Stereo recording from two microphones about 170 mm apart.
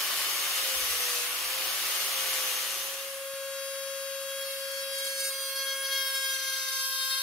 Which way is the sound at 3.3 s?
5° left (ahead or behind).